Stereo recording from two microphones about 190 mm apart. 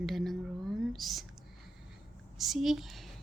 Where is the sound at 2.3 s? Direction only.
Centre (ahead or behind).